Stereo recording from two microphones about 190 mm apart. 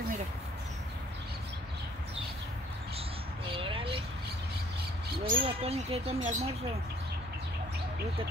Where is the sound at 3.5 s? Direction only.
25° right (ahead or behind).